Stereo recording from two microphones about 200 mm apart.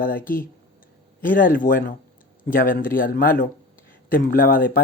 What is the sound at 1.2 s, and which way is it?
Speech, 45° left (ahead or behind).